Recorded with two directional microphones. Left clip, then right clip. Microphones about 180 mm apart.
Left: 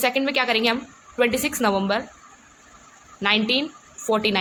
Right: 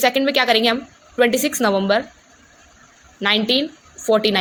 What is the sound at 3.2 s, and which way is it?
A woman's voice, 20° right (ahead or behind).